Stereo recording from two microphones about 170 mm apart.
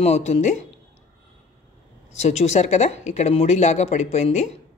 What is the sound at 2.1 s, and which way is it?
Speech, 40° left (ahead or behind).